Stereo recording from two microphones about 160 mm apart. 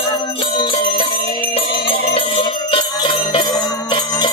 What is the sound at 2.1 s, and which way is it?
Jingle bell, 30° left (ahead or behind).